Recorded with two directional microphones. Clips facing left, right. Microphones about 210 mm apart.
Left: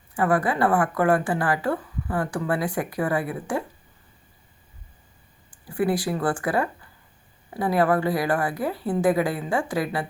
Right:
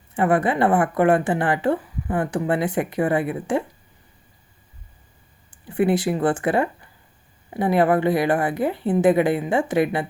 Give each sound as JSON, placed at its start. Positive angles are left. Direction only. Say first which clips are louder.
{"t": 0.1, "sound": "speech", "louder": "right 3 dB", "side_deg": -25}
{"t": 5.5, "sound": "speech", "louder": "right 4 dB", "side_deg": -25}